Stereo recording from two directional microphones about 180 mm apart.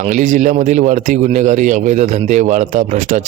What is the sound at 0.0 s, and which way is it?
A man's voice, 45° right (ahead or behind).